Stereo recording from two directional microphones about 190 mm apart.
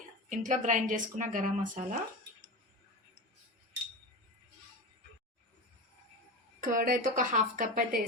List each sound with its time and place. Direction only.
0.3 s a woman's voice: 40° right (ahead or behind)
6.6 s a woman's voice: 45° right (ahead or behind)